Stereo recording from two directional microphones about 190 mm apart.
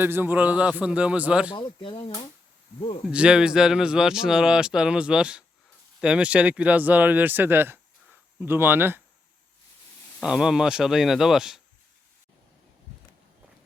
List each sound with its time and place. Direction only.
0.0 s speech: 10° right (ahead or behind)
1.5 s speech: 25° left (ahead or behind)
3.1 s speech: 5° right (ahead or behind)
10.2 s speech: 5° right (ahead or behind)